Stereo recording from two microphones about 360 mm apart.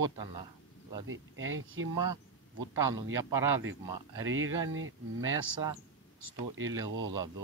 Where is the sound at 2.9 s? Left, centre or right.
Centre.